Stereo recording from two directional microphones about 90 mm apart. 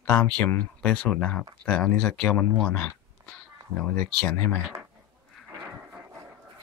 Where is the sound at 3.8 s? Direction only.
15° left (ahead or behind).